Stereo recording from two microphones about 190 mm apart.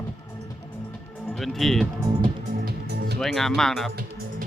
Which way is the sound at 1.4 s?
Centre (ahead or behind).